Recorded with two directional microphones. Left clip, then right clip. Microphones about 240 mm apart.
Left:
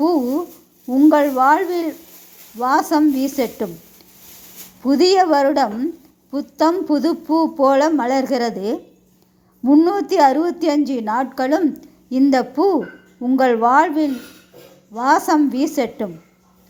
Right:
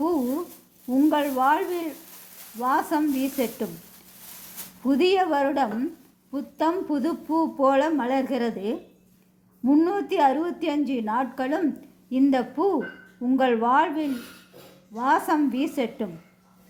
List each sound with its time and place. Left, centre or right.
0.0 s a woman's voice: left
4.8 s a woman's voice: left